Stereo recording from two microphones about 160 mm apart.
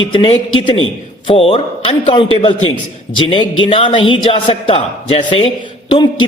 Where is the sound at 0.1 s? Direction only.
25° left (ahead or behind).